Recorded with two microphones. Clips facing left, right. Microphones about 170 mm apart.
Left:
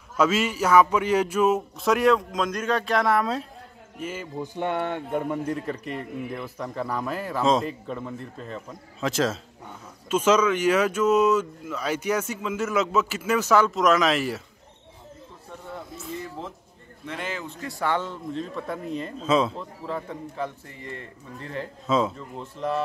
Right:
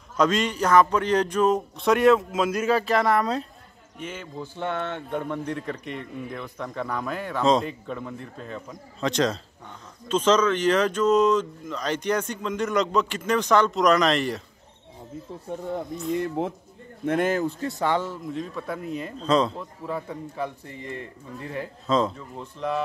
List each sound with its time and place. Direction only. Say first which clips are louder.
0.2 s speech: even; 5° left (ahead or behind)
16.2 s speech: right 9 dB; 60° right (ahead or behind)
17.6 s speech: left 3 dB; 20° right (ahead or behind); by 19.6 s 5° left (ahead or behind)
19.9 s a man's voice: right 1 dB; 10° right (ahead or behind)
21.8 s speech: even; 5° left (ahead or behind)